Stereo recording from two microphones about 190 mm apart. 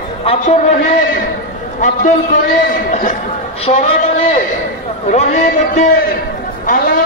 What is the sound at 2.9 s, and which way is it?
Speech, 45° left (ahead or behind).